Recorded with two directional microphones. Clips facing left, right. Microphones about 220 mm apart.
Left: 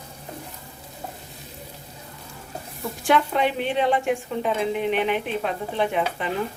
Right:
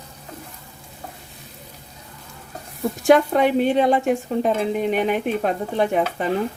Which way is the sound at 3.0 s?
45° right (ahead or behind).